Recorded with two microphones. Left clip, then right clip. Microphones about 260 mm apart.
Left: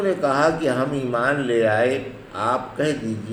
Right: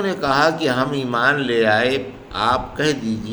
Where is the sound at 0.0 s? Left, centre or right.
Right.